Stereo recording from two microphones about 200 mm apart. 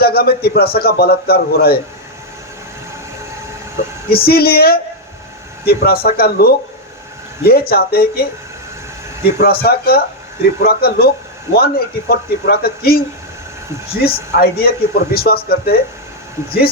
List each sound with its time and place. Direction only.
0.0 s a man's voice: 50° left (ahead or behind)
4.1 s a man's voice: 50° left (ahead or behind)
14.0 s a man's voice: 50° left (ahead or behind)